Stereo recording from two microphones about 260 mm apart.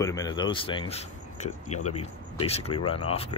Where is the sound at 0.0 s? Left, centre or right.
Centre.